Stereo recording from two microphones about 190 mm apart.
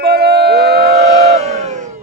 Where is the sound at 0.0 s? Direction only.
55° right (ahead or behind).